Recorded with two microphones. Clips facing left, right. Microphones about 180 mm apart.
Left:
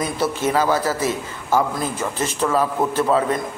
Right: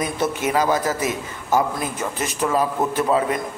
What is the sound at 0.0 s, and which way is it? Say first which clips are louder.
A man's voice: left 1 dB; 15° right (ahead or behind).